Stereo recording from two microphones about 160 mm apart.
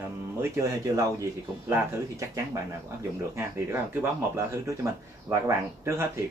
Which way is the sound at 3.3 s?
15° right (ahead or behind).